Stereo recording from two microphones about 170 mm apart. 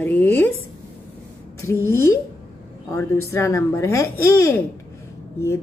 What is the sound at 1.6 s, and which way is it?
Speech, 15° left (ahead or behind).